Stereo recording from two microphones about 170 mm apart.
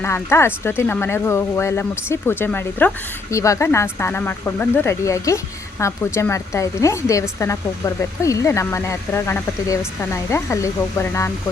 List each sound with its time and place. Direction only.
0.0 s speech: 15° left (ahead or behind)